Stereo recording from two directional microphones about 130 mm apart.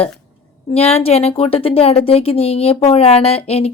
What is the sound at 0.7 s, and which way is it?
Speech, 50° left (ahead or behind).